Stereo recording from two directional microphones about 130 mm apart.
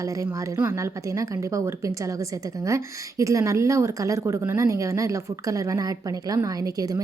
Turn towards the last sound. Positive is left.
turn(degrees=-25)  # may be behind; listen again after turning